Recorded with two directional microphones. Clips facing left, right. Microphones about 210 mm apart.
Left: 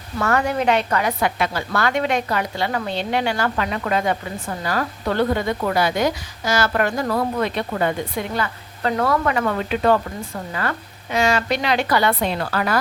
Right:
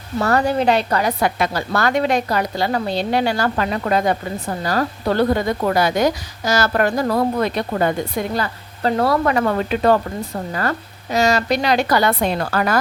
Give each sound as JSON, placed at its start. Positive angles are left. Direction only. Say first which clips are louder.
{"t": 0.2, "sound": "a woman's voice", "louder": "right 3 dB", "side_deg": -35}